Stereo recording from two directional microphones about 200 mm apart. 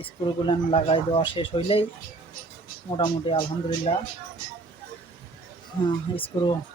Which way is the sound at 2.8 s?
25° left (ahead or behind).